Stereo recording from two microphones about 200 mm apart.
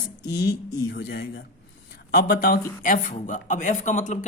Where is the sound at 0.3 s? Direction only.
55° left (ahead or behind).